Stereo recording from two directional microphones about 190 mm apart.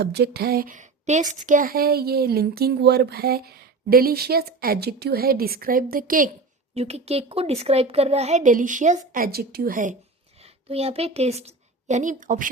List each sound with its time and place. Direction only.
0.0 s speech: 55° right (ahead or behind)
6.7 s a woman's voice: 35° right (ahead or behind)
10.4 s a woman's voice: 30° right (ahead or behind)